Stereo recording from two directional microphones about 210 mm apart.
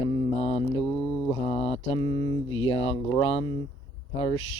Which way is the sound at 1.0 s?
5° left (ahead or behind).